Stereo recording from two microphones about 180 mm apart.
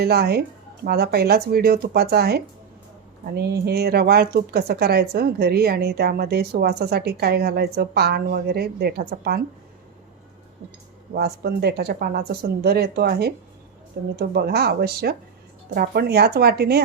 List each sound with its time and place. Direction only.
0.0 s speech: 60° right (ahead or behind)
11.1 s speech: 60° right (ahead or behind)